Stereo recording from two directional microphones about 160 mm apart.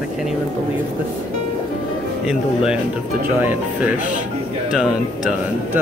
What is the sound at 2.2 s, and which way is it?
Speech, 5° right (ahead or behind).